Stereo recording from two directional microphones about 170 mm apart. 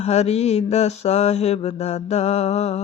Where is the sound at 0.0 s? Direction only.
40° left (ahead or behind).